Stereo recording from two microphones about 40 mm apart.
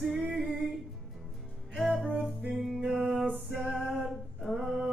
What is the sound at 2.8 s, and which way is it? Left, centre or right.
Music, centre.